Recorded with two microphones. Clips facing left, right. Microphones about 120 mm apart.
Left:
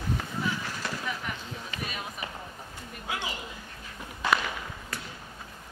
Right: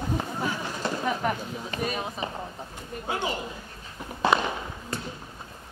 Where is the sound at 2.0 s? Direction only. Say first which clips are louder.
Right 6 dB; 30° right (ahead or behind).